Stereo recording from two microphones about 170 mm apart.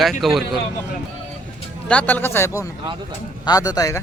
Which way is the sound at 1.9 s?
10° left (ahead or behind).